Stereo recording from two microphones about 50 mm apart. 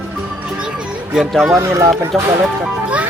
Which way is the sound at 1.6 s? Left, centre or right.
Right.